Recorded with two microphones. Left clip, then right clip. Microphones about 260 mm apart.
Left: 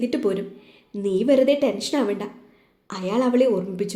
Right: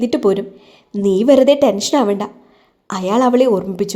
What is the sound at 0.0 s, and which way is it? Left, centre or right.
A woman's voice, right.